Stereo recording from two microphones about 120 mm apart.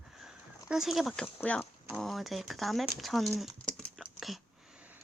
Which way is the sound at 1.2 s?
10° left (ahead or behind).